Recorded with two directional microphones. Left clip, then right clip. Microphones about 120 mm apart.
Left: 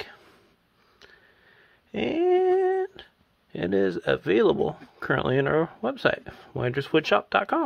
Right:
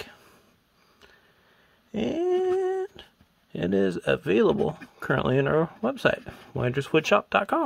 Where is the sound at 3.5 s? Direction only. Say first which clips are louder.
Left 1 dB; 30° right (ahead or behind).